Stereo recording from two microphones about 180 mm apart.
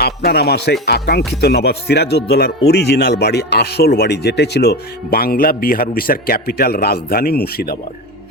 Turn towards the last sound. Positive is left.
turn(degrees=60)  # may be behind; listen again after turning